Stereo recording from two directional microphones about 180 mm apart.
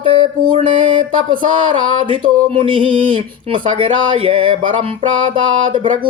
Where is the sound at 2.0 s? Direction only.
30° right (ahead or behind).